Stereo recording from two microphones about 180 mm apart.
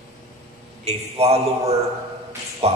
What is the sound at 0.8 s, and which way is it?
A man's voice, 35° right (ahead or behind).